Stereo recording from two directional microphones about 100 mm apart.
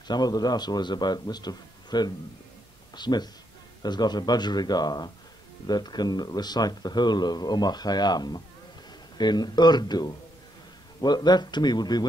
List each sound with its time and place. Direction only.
0.1 s speech: 40° left (ahead or behind)